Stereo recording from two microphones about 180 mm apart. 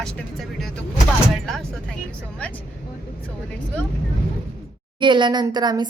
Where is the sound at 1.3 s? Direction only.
Centre (ahead or behind).